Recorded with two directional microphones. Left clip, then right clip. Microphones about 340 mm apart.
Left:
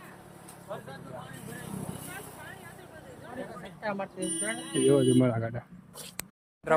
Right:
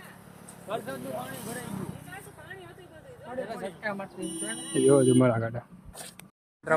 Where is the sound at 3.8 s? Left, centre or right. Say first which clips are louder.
Left 3 dB; left.